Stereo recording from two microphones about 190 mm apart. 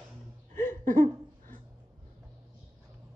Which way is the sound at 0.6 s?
10° left (ahead or behind).